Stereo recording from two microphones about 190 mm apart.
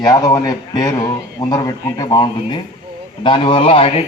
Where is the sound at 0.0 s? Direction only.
20° left (ahead or behind).